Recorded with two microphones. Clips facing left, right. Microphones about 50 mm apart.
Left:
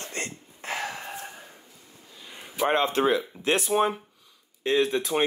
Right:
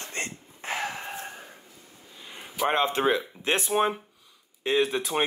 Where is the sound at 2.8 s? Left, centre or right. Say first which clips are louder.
Even; centre.